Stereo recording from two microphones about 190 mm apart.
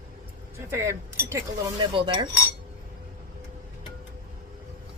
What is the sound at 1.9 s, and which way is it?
Cutlery, 25° right (ahead or behind).